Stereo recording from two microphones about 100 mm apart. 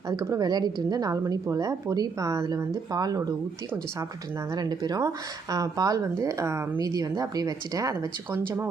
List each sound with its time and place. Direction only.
0.1 s speech: 40° right (ahead or behind)
4.5 s speech: 40° right (ahead or behind)
8.3 s speech: 20° right (ahead or behind)